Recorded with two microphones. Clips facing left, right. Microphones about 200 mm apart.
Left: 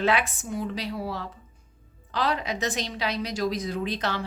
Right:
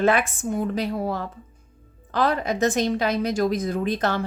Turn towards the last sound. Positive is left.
turn(degrees=-50)  # may be behind; listen again after turning